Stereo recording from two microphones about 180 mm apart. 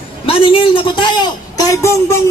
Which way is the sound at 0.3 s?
30° left (ahead or behind).